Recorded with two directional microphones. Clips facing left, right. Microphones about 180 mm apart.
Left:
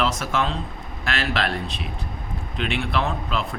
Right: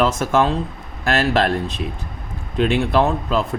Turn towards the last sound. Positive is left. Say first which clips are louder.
# right 7 dB
turn(degrees=-40)  # may be behind; listen again after turning